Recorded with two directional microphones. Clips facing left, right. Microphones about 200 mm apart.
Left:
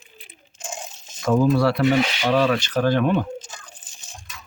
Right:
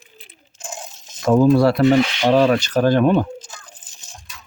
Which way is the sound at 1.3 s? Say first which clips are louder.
Right 5 dB; 40° right (ahead or behind).